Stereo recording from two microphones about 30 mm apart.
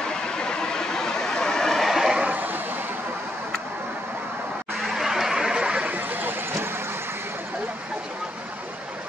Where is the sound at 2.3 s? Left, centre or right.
Right.